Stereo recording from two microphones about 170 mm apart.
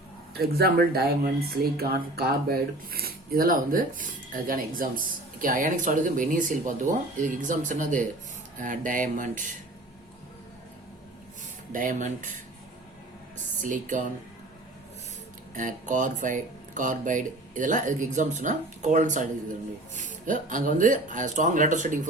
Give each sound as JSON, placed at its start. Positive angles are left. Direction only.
{"t": 0.3, "sound": "speech", "side_deg": -65}
{"t": 11.7, "sound": "speech", "side_deg": -50}
{"t": 13.6, "sound": "speech", "side_deg": -50}
{"t": 15.5, "sound": "speech", "side_deg": -50}
{"t": 20.2, "sound": "speech", "side_deg": -50}